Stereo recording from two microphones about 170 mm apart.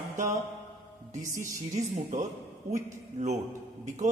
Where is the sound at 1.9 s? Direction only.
45° right (ahead or behind).